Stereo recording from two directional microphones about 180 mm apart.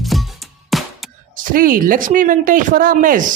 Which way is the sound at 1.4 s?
50° right (ahead or behind).